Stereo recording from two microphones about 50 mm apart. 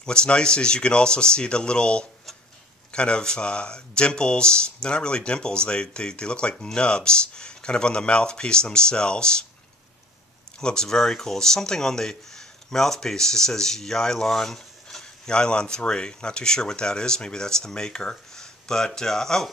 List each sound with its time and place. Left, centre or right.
0.0 s speech: centre
10.6 s speech: centre